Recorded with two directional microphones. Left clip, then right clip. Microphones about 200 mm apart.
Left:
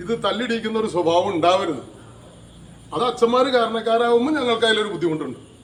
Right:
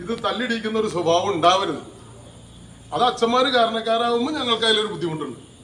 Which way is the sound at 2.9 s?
10° right (ahead or behind).